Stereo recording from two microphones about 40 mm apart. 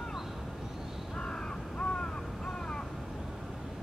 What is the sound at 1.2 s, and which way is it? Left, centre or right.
Crow, left.